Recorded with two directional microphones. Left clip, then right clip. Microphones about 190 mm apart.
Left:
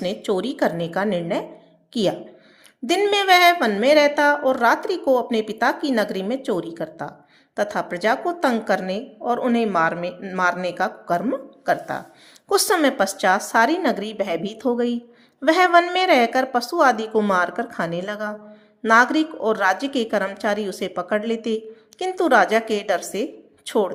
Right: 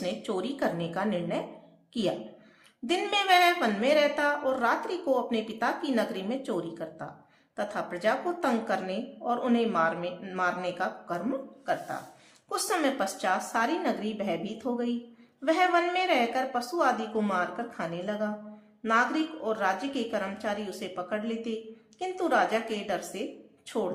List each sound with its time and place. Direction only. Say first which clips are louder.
0.0 s a woman's voice: left 9 dB; 35° left (ahead or behind)